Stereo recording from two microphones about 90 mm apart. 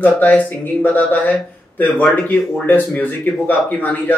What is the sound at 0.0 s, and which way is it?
A man's voice, 15° left (ahead or behind).